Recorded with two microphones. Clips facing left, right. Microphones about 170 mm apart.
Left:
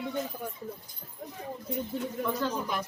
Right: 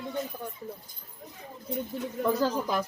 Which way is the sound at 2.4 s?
35° right (ahead or behind).